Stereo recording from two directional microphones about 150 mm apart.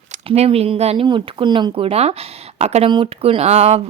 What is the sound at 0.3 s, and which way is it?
Speech, 40° right (ahead or behind).